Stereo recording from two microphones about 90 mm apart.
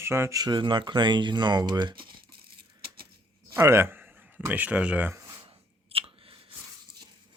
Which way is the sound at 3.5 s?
30° right (ahead or behind).